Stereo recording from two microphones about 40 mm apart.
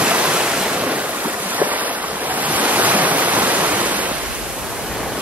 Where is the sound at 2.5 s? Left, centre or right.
Right.